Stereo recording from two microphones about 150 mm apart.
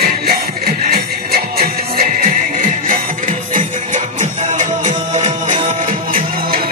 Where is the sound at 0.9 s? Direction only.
85° right.